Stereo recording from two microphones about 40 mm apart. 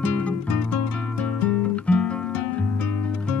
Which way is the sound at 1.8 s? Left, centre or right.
Left.